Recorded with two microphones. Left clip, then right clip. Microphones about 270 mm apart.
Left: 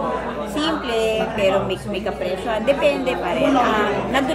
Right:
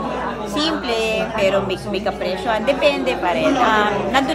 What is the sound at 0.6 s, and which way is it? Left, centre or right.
A woman's voice, centre.